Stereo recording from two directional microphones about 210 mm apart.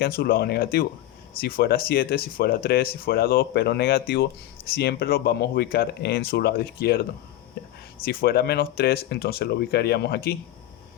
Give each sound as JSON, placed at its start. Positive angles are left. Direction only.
{"t": 0.0, "sound": "speech", "side_deg": 45}
{"t": 8.0, "sound": "speech", "side_deg": 45}